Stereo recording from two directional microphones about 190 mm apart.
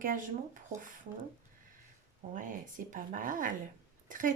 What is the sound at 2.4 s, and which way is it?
Speech, 45° right (ahead or behind).